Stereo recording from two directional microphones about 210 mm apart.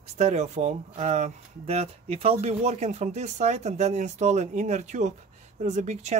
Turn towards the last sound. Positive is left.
turn(degrees=-35)  # may be behind; listen again after turning